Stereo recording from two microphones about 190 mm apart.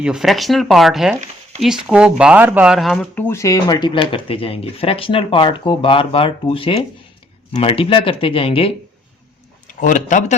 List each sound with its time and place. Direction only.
0.0 s speech: 5° right (ahead or behind); by 8.7 s 30° left (ahead or behind)
9.6 s speech: 45° left (ahead or behind)